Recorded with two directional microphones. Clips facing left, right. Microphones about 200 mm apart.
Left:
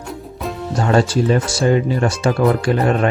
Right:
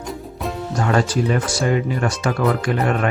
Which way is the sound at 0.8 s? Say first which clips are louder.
Left 3 dB; 30° left (ahead or behind).